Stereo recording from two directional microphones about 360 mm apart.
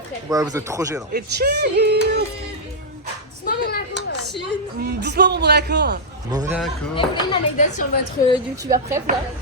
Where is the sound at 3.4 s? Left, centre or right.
Left.